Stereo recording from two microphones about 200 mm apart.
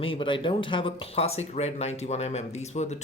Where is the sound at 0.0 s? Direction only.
25° left (ahead or behind).